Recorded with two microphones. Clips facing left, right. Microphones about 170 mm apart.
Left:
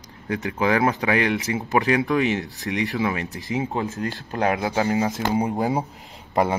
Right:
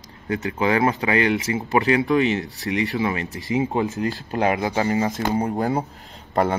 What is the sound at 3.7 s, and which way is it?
Speech, 15° right (ahead or behind).